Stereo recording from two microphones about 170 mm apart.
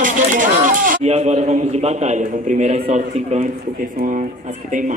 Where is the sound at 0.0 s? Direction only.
50° right (ahead or behind).